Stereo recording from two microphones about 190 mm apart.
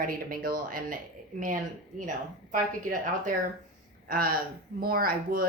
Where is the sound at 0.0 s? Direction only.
50° right (ahead or behind).